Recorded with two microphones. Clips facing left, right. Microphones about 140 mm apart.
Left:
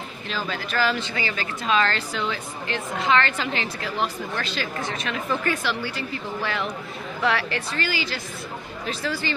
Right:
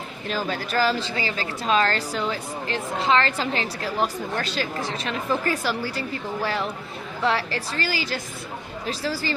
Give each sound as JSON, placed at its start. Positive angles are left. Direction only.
{"t": 0.3, "sound": "a woman's voice", "side_deg": -45}